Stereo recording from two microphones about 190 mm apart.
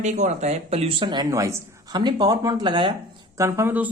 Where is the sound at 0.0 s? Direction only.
40° right (ahead or behind).